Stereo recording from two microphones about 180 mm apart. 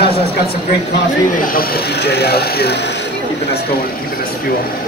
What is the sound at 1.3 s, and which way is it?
Speech, 50° left (ahead or behind).